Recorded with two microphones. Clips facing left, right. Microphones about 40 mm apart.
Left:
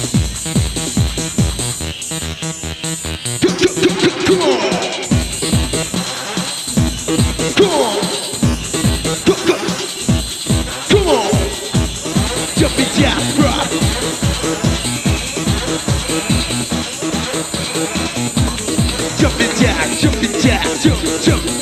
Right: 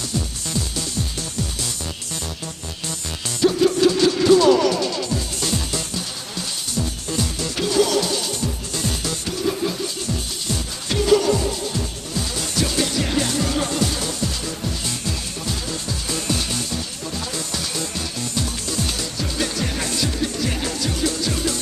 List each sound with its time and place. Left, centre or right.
0.1 s music: left
3.4 s music: left
5.4 s music: left
15.3 s music: left
16.7 s music: left
18.3 s music: left
19.1 s music: left